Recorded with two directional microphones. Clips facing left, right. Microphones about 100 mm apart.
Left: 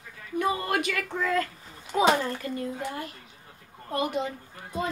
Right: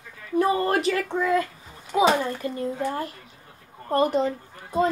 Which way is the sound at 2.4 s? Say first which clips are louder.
Right 5 dB; 30° right (ahead or behind).